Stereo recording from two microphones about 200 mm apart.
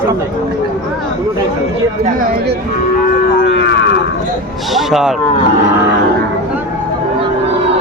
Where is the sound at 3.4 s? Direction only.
60° left (ahead or behind).